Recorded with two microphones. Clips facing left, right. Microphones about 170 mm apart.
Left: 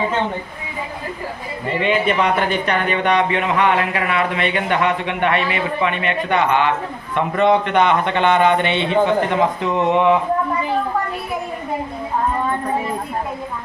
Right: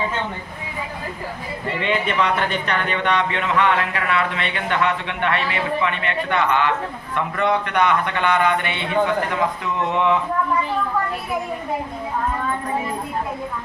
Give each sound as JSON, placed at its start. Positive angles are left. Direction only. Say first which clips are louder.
{"t": 2.1, "sound": "a man's voice", "louder": "left 3 dB", "side_deg": 15}